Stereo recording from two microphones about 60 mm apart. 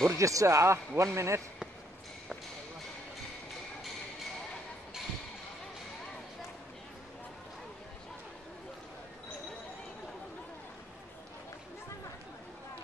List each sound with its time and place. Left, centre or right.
0.0 s speech: right